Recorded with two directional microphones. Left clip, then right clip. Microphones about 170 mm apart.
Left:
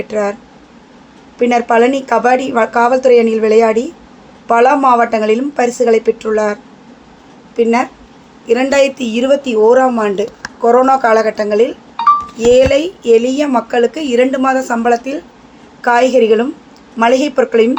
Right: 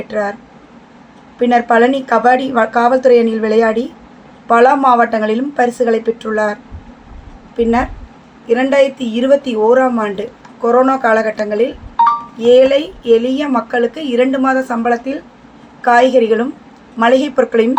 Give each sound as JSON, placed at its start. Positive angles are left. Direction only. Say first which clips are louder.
{"t": 0.1, "sound": "a woman's voice", "louder": "left 1 dB", "side_deg": 25}
{"t": 1.4, "sound": "a woman's voice", "louder": "even", "side_deg": 25}